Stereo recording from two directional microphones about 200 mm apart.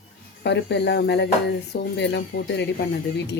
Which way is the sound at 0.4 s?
60° left (ahead or behind).